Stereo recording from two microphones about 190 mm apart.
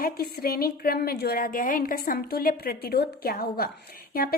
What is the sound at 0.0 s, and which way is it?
A woman's voice, 55° left (ahead or behind).